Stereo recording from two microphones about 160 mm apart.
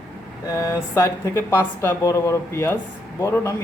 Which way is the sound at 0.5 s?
20° left (ahead or behind).